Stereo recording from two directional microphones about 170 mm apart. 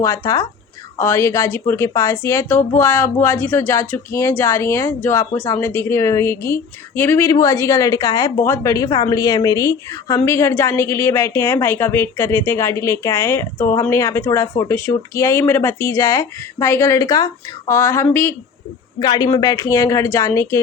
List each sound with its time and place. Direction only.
0.0 s a woman's voice: 20° left (ahead or behind)